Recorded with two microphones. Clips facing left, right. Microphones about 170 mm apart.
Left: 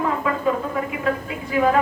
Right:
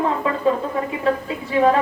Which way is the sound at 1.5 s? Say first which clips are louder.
Right 3 dB; 30° right (ahead or behind).